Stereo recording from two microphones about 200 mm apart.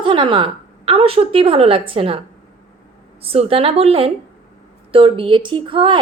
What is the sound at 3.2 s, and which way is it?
A woman's voice, 30° right (ahead or behind).